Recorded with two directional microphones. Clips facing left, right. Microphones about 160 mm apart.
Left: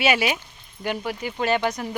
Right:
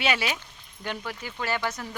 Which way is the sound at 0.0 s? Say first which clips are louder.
Left 5 dB; 10° left (ahead or behind).